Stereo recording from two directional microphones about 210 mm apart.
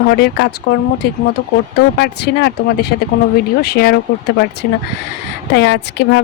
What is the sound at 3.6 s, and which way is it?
Speech, 50° left (ahead or behind).